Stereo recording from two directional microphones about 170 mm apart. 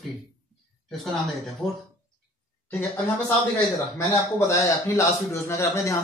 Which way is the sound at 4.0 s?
10° left (ahead or behind).